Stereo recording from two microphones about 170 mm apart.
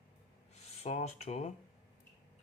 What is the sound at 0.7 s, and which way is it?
Speech, 40° left (ahead or behind).